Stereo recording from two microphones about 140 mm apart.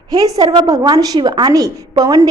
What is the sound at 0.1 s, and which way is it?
A woman's voice, 25° right (ahead or behind).